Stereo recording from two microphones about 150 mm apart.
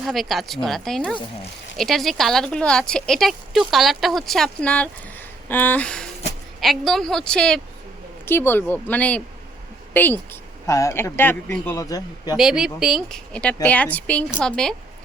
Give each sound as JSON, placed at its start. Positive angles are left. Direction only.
{"t": 0.0, "sound": "a woman's voice", "side_deg": 0}
{"t": 12.4, "sound": "a woman's voice", "side_deg": -5}